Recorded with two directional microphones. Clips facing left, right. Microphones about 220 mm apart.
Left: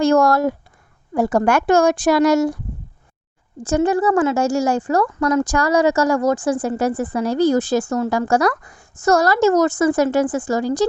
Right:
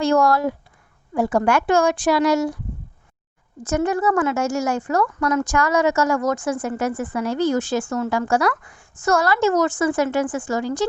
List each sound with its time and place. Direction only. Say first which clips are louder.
0.0 s a woman's voice: left 3 dB; 45° left (ahead or behind)
3.6 s speech: left 4 dB; 30° left (ahead or behind)